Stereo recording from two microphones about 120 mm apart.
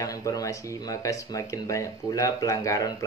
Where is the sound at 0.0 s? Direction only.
30° left (ahead or behind).